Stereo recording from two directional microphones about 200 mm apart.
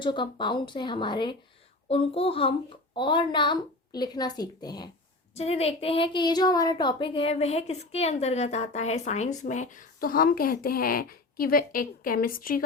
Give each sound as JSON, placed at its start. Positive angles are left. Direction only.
{"t": 0.0, "sound": "a woman's voice", "side_deg": 25}
{"t": 5.3, "sound": "a woman's voice", "side_deg": 30}